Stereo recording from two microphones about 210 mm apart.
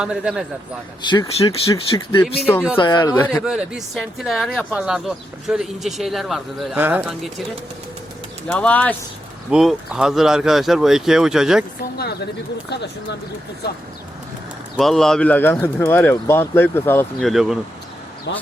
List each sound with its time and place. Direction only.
0.0 s speech: 5° right (ahead or behind)
1.0 s speech: 20° left (ahead or behind)
3.4 s speech: 5° right (ahead or behind)
8.4 s speech: 5° left (ahead or behind)
11.8 s speech: 50° left (ahead or behind)
14.8 s speech: centre (ahead or behind)
18.3 s speech: 55° left (ahead or behind)